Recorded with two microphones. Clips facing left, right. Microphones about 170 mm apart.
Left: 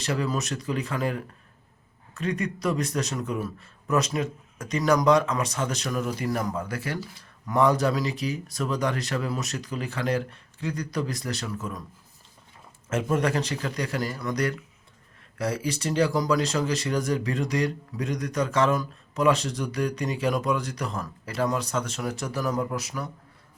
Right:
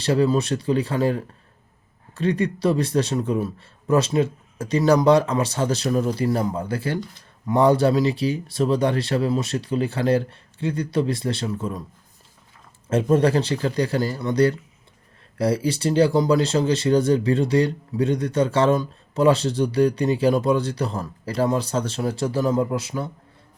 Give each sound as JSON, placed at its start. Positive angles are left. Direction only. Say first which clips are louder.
{"t": 0.0, "sound": "speech", "louder": "right 8 dB", "side_deg": -30}
{"t": 12.9, "sound": "speech", "louder": "right 7 dB", "side_deg": -30}